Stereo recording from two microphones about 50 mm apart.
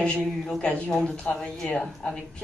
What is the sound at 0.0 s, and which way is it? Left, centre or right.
A man's voice, centre.